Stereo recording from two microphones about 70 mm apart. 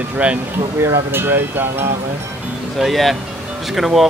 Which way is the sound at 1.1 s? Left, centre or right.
Right.